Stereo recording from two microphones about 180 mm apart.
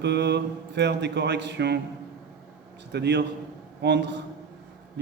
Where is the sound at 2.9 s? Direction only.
70° right (ahead or behind).